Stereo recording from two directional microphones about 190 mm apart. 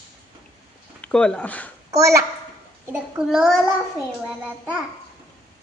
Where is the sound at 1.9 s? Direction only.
15° right (ahead or behind).